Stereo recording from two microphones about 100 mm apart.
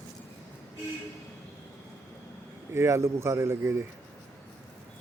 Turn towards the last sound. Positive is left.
turn(degrees=-25)  # may be behind; listen again after turning